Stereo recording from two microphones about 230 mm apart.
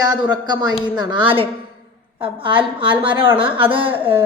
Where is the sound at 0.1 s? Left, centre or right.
Centre.